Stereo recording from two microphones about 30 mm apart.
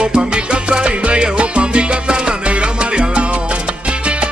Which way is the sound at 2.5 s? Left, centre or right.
Right.